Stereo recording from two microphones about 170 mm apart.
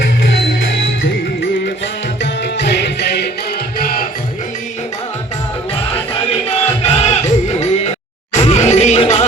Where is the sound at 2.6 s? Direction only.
90° left.